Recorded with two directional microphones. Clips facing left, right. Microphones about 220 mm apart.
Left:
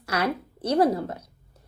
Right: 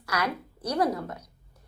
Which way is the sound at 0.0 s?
30° left (ahead or behind).